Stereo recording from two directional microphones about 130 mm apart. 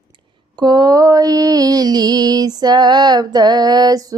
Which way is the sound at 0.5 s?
35° right (ahead or behind).